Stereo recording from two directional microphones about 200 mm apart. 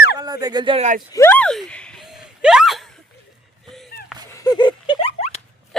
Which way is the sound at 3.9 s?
90° right.